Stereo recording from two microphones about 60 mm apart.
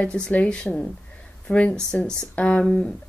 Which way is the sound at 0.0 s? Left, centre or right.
Left.